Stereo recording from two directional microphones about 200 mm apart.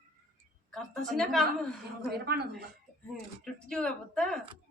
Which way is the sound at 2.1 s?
55° right (ahead or behind).